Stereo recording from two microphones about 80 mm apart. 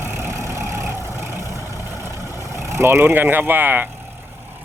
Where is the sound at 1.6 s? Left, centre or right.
Left.